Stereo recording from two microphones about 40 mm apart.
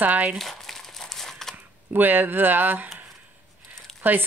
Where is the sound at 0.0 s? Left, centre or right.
Right.